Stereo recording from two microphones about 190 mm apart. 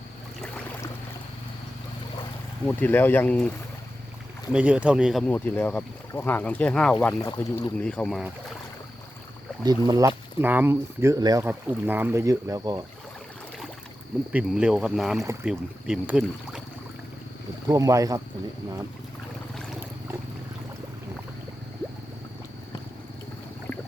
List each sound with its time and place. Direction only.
2.6 s speech: 10° left (ahead or behind)
4.5 s speech: 5° right (ahead or behind)
9.6 s speech: 20° right (ahead or behind)
10.3 s speech: 10° right (ahead or behind)
14.3 s speech: 5° right (ahead or behind)
17.7 s speech: 15° right (ahead or behind)